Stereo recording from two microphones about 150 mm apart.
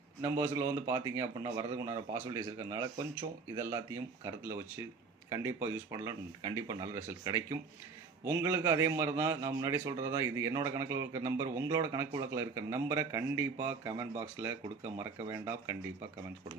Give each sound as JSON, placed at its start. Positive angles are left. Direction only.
{"t": 0.2, "sound": "a man's voice", "side_deg": -20}